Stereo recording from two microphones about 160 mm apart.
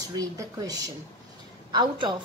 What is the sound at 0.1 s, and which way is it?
A woman's voice, 25° right (ahead or behind).